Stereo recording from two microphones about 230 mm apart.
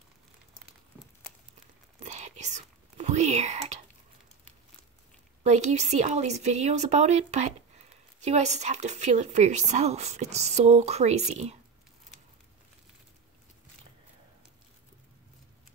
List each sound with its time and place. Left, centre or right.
2.0 s whispering: right
5.4 s speech: right